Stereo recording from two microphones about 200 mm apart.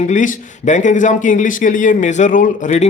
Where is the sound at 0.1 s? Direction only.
40° left (ahead or behind).